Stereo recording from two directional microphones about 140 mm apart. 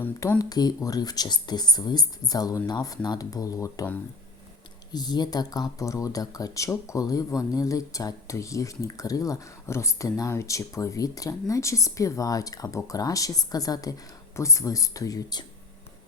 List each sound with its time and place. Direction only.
0.0 s speech: 15° left (ahead or behind)
0.4 s speech: 25° left (ahead or behind)
4.9 s speech: 30° left (ahead or behind)